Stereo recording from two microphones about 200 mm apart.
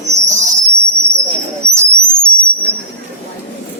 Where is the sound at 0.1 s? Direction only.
15° right (ahead or behind).